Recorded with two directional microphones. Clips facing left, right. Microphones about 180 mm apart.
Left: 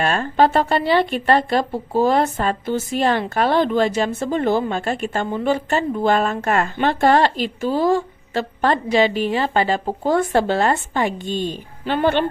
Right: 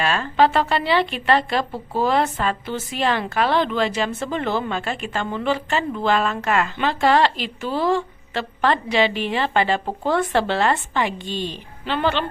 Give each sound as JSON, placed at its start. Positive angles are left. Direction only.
{"t": 0.0, "sound": "speech", "side_deg": 45}